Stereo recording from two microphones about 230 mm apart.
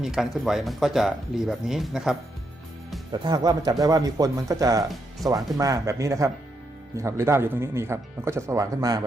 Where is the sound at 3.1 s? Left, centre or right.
Centre.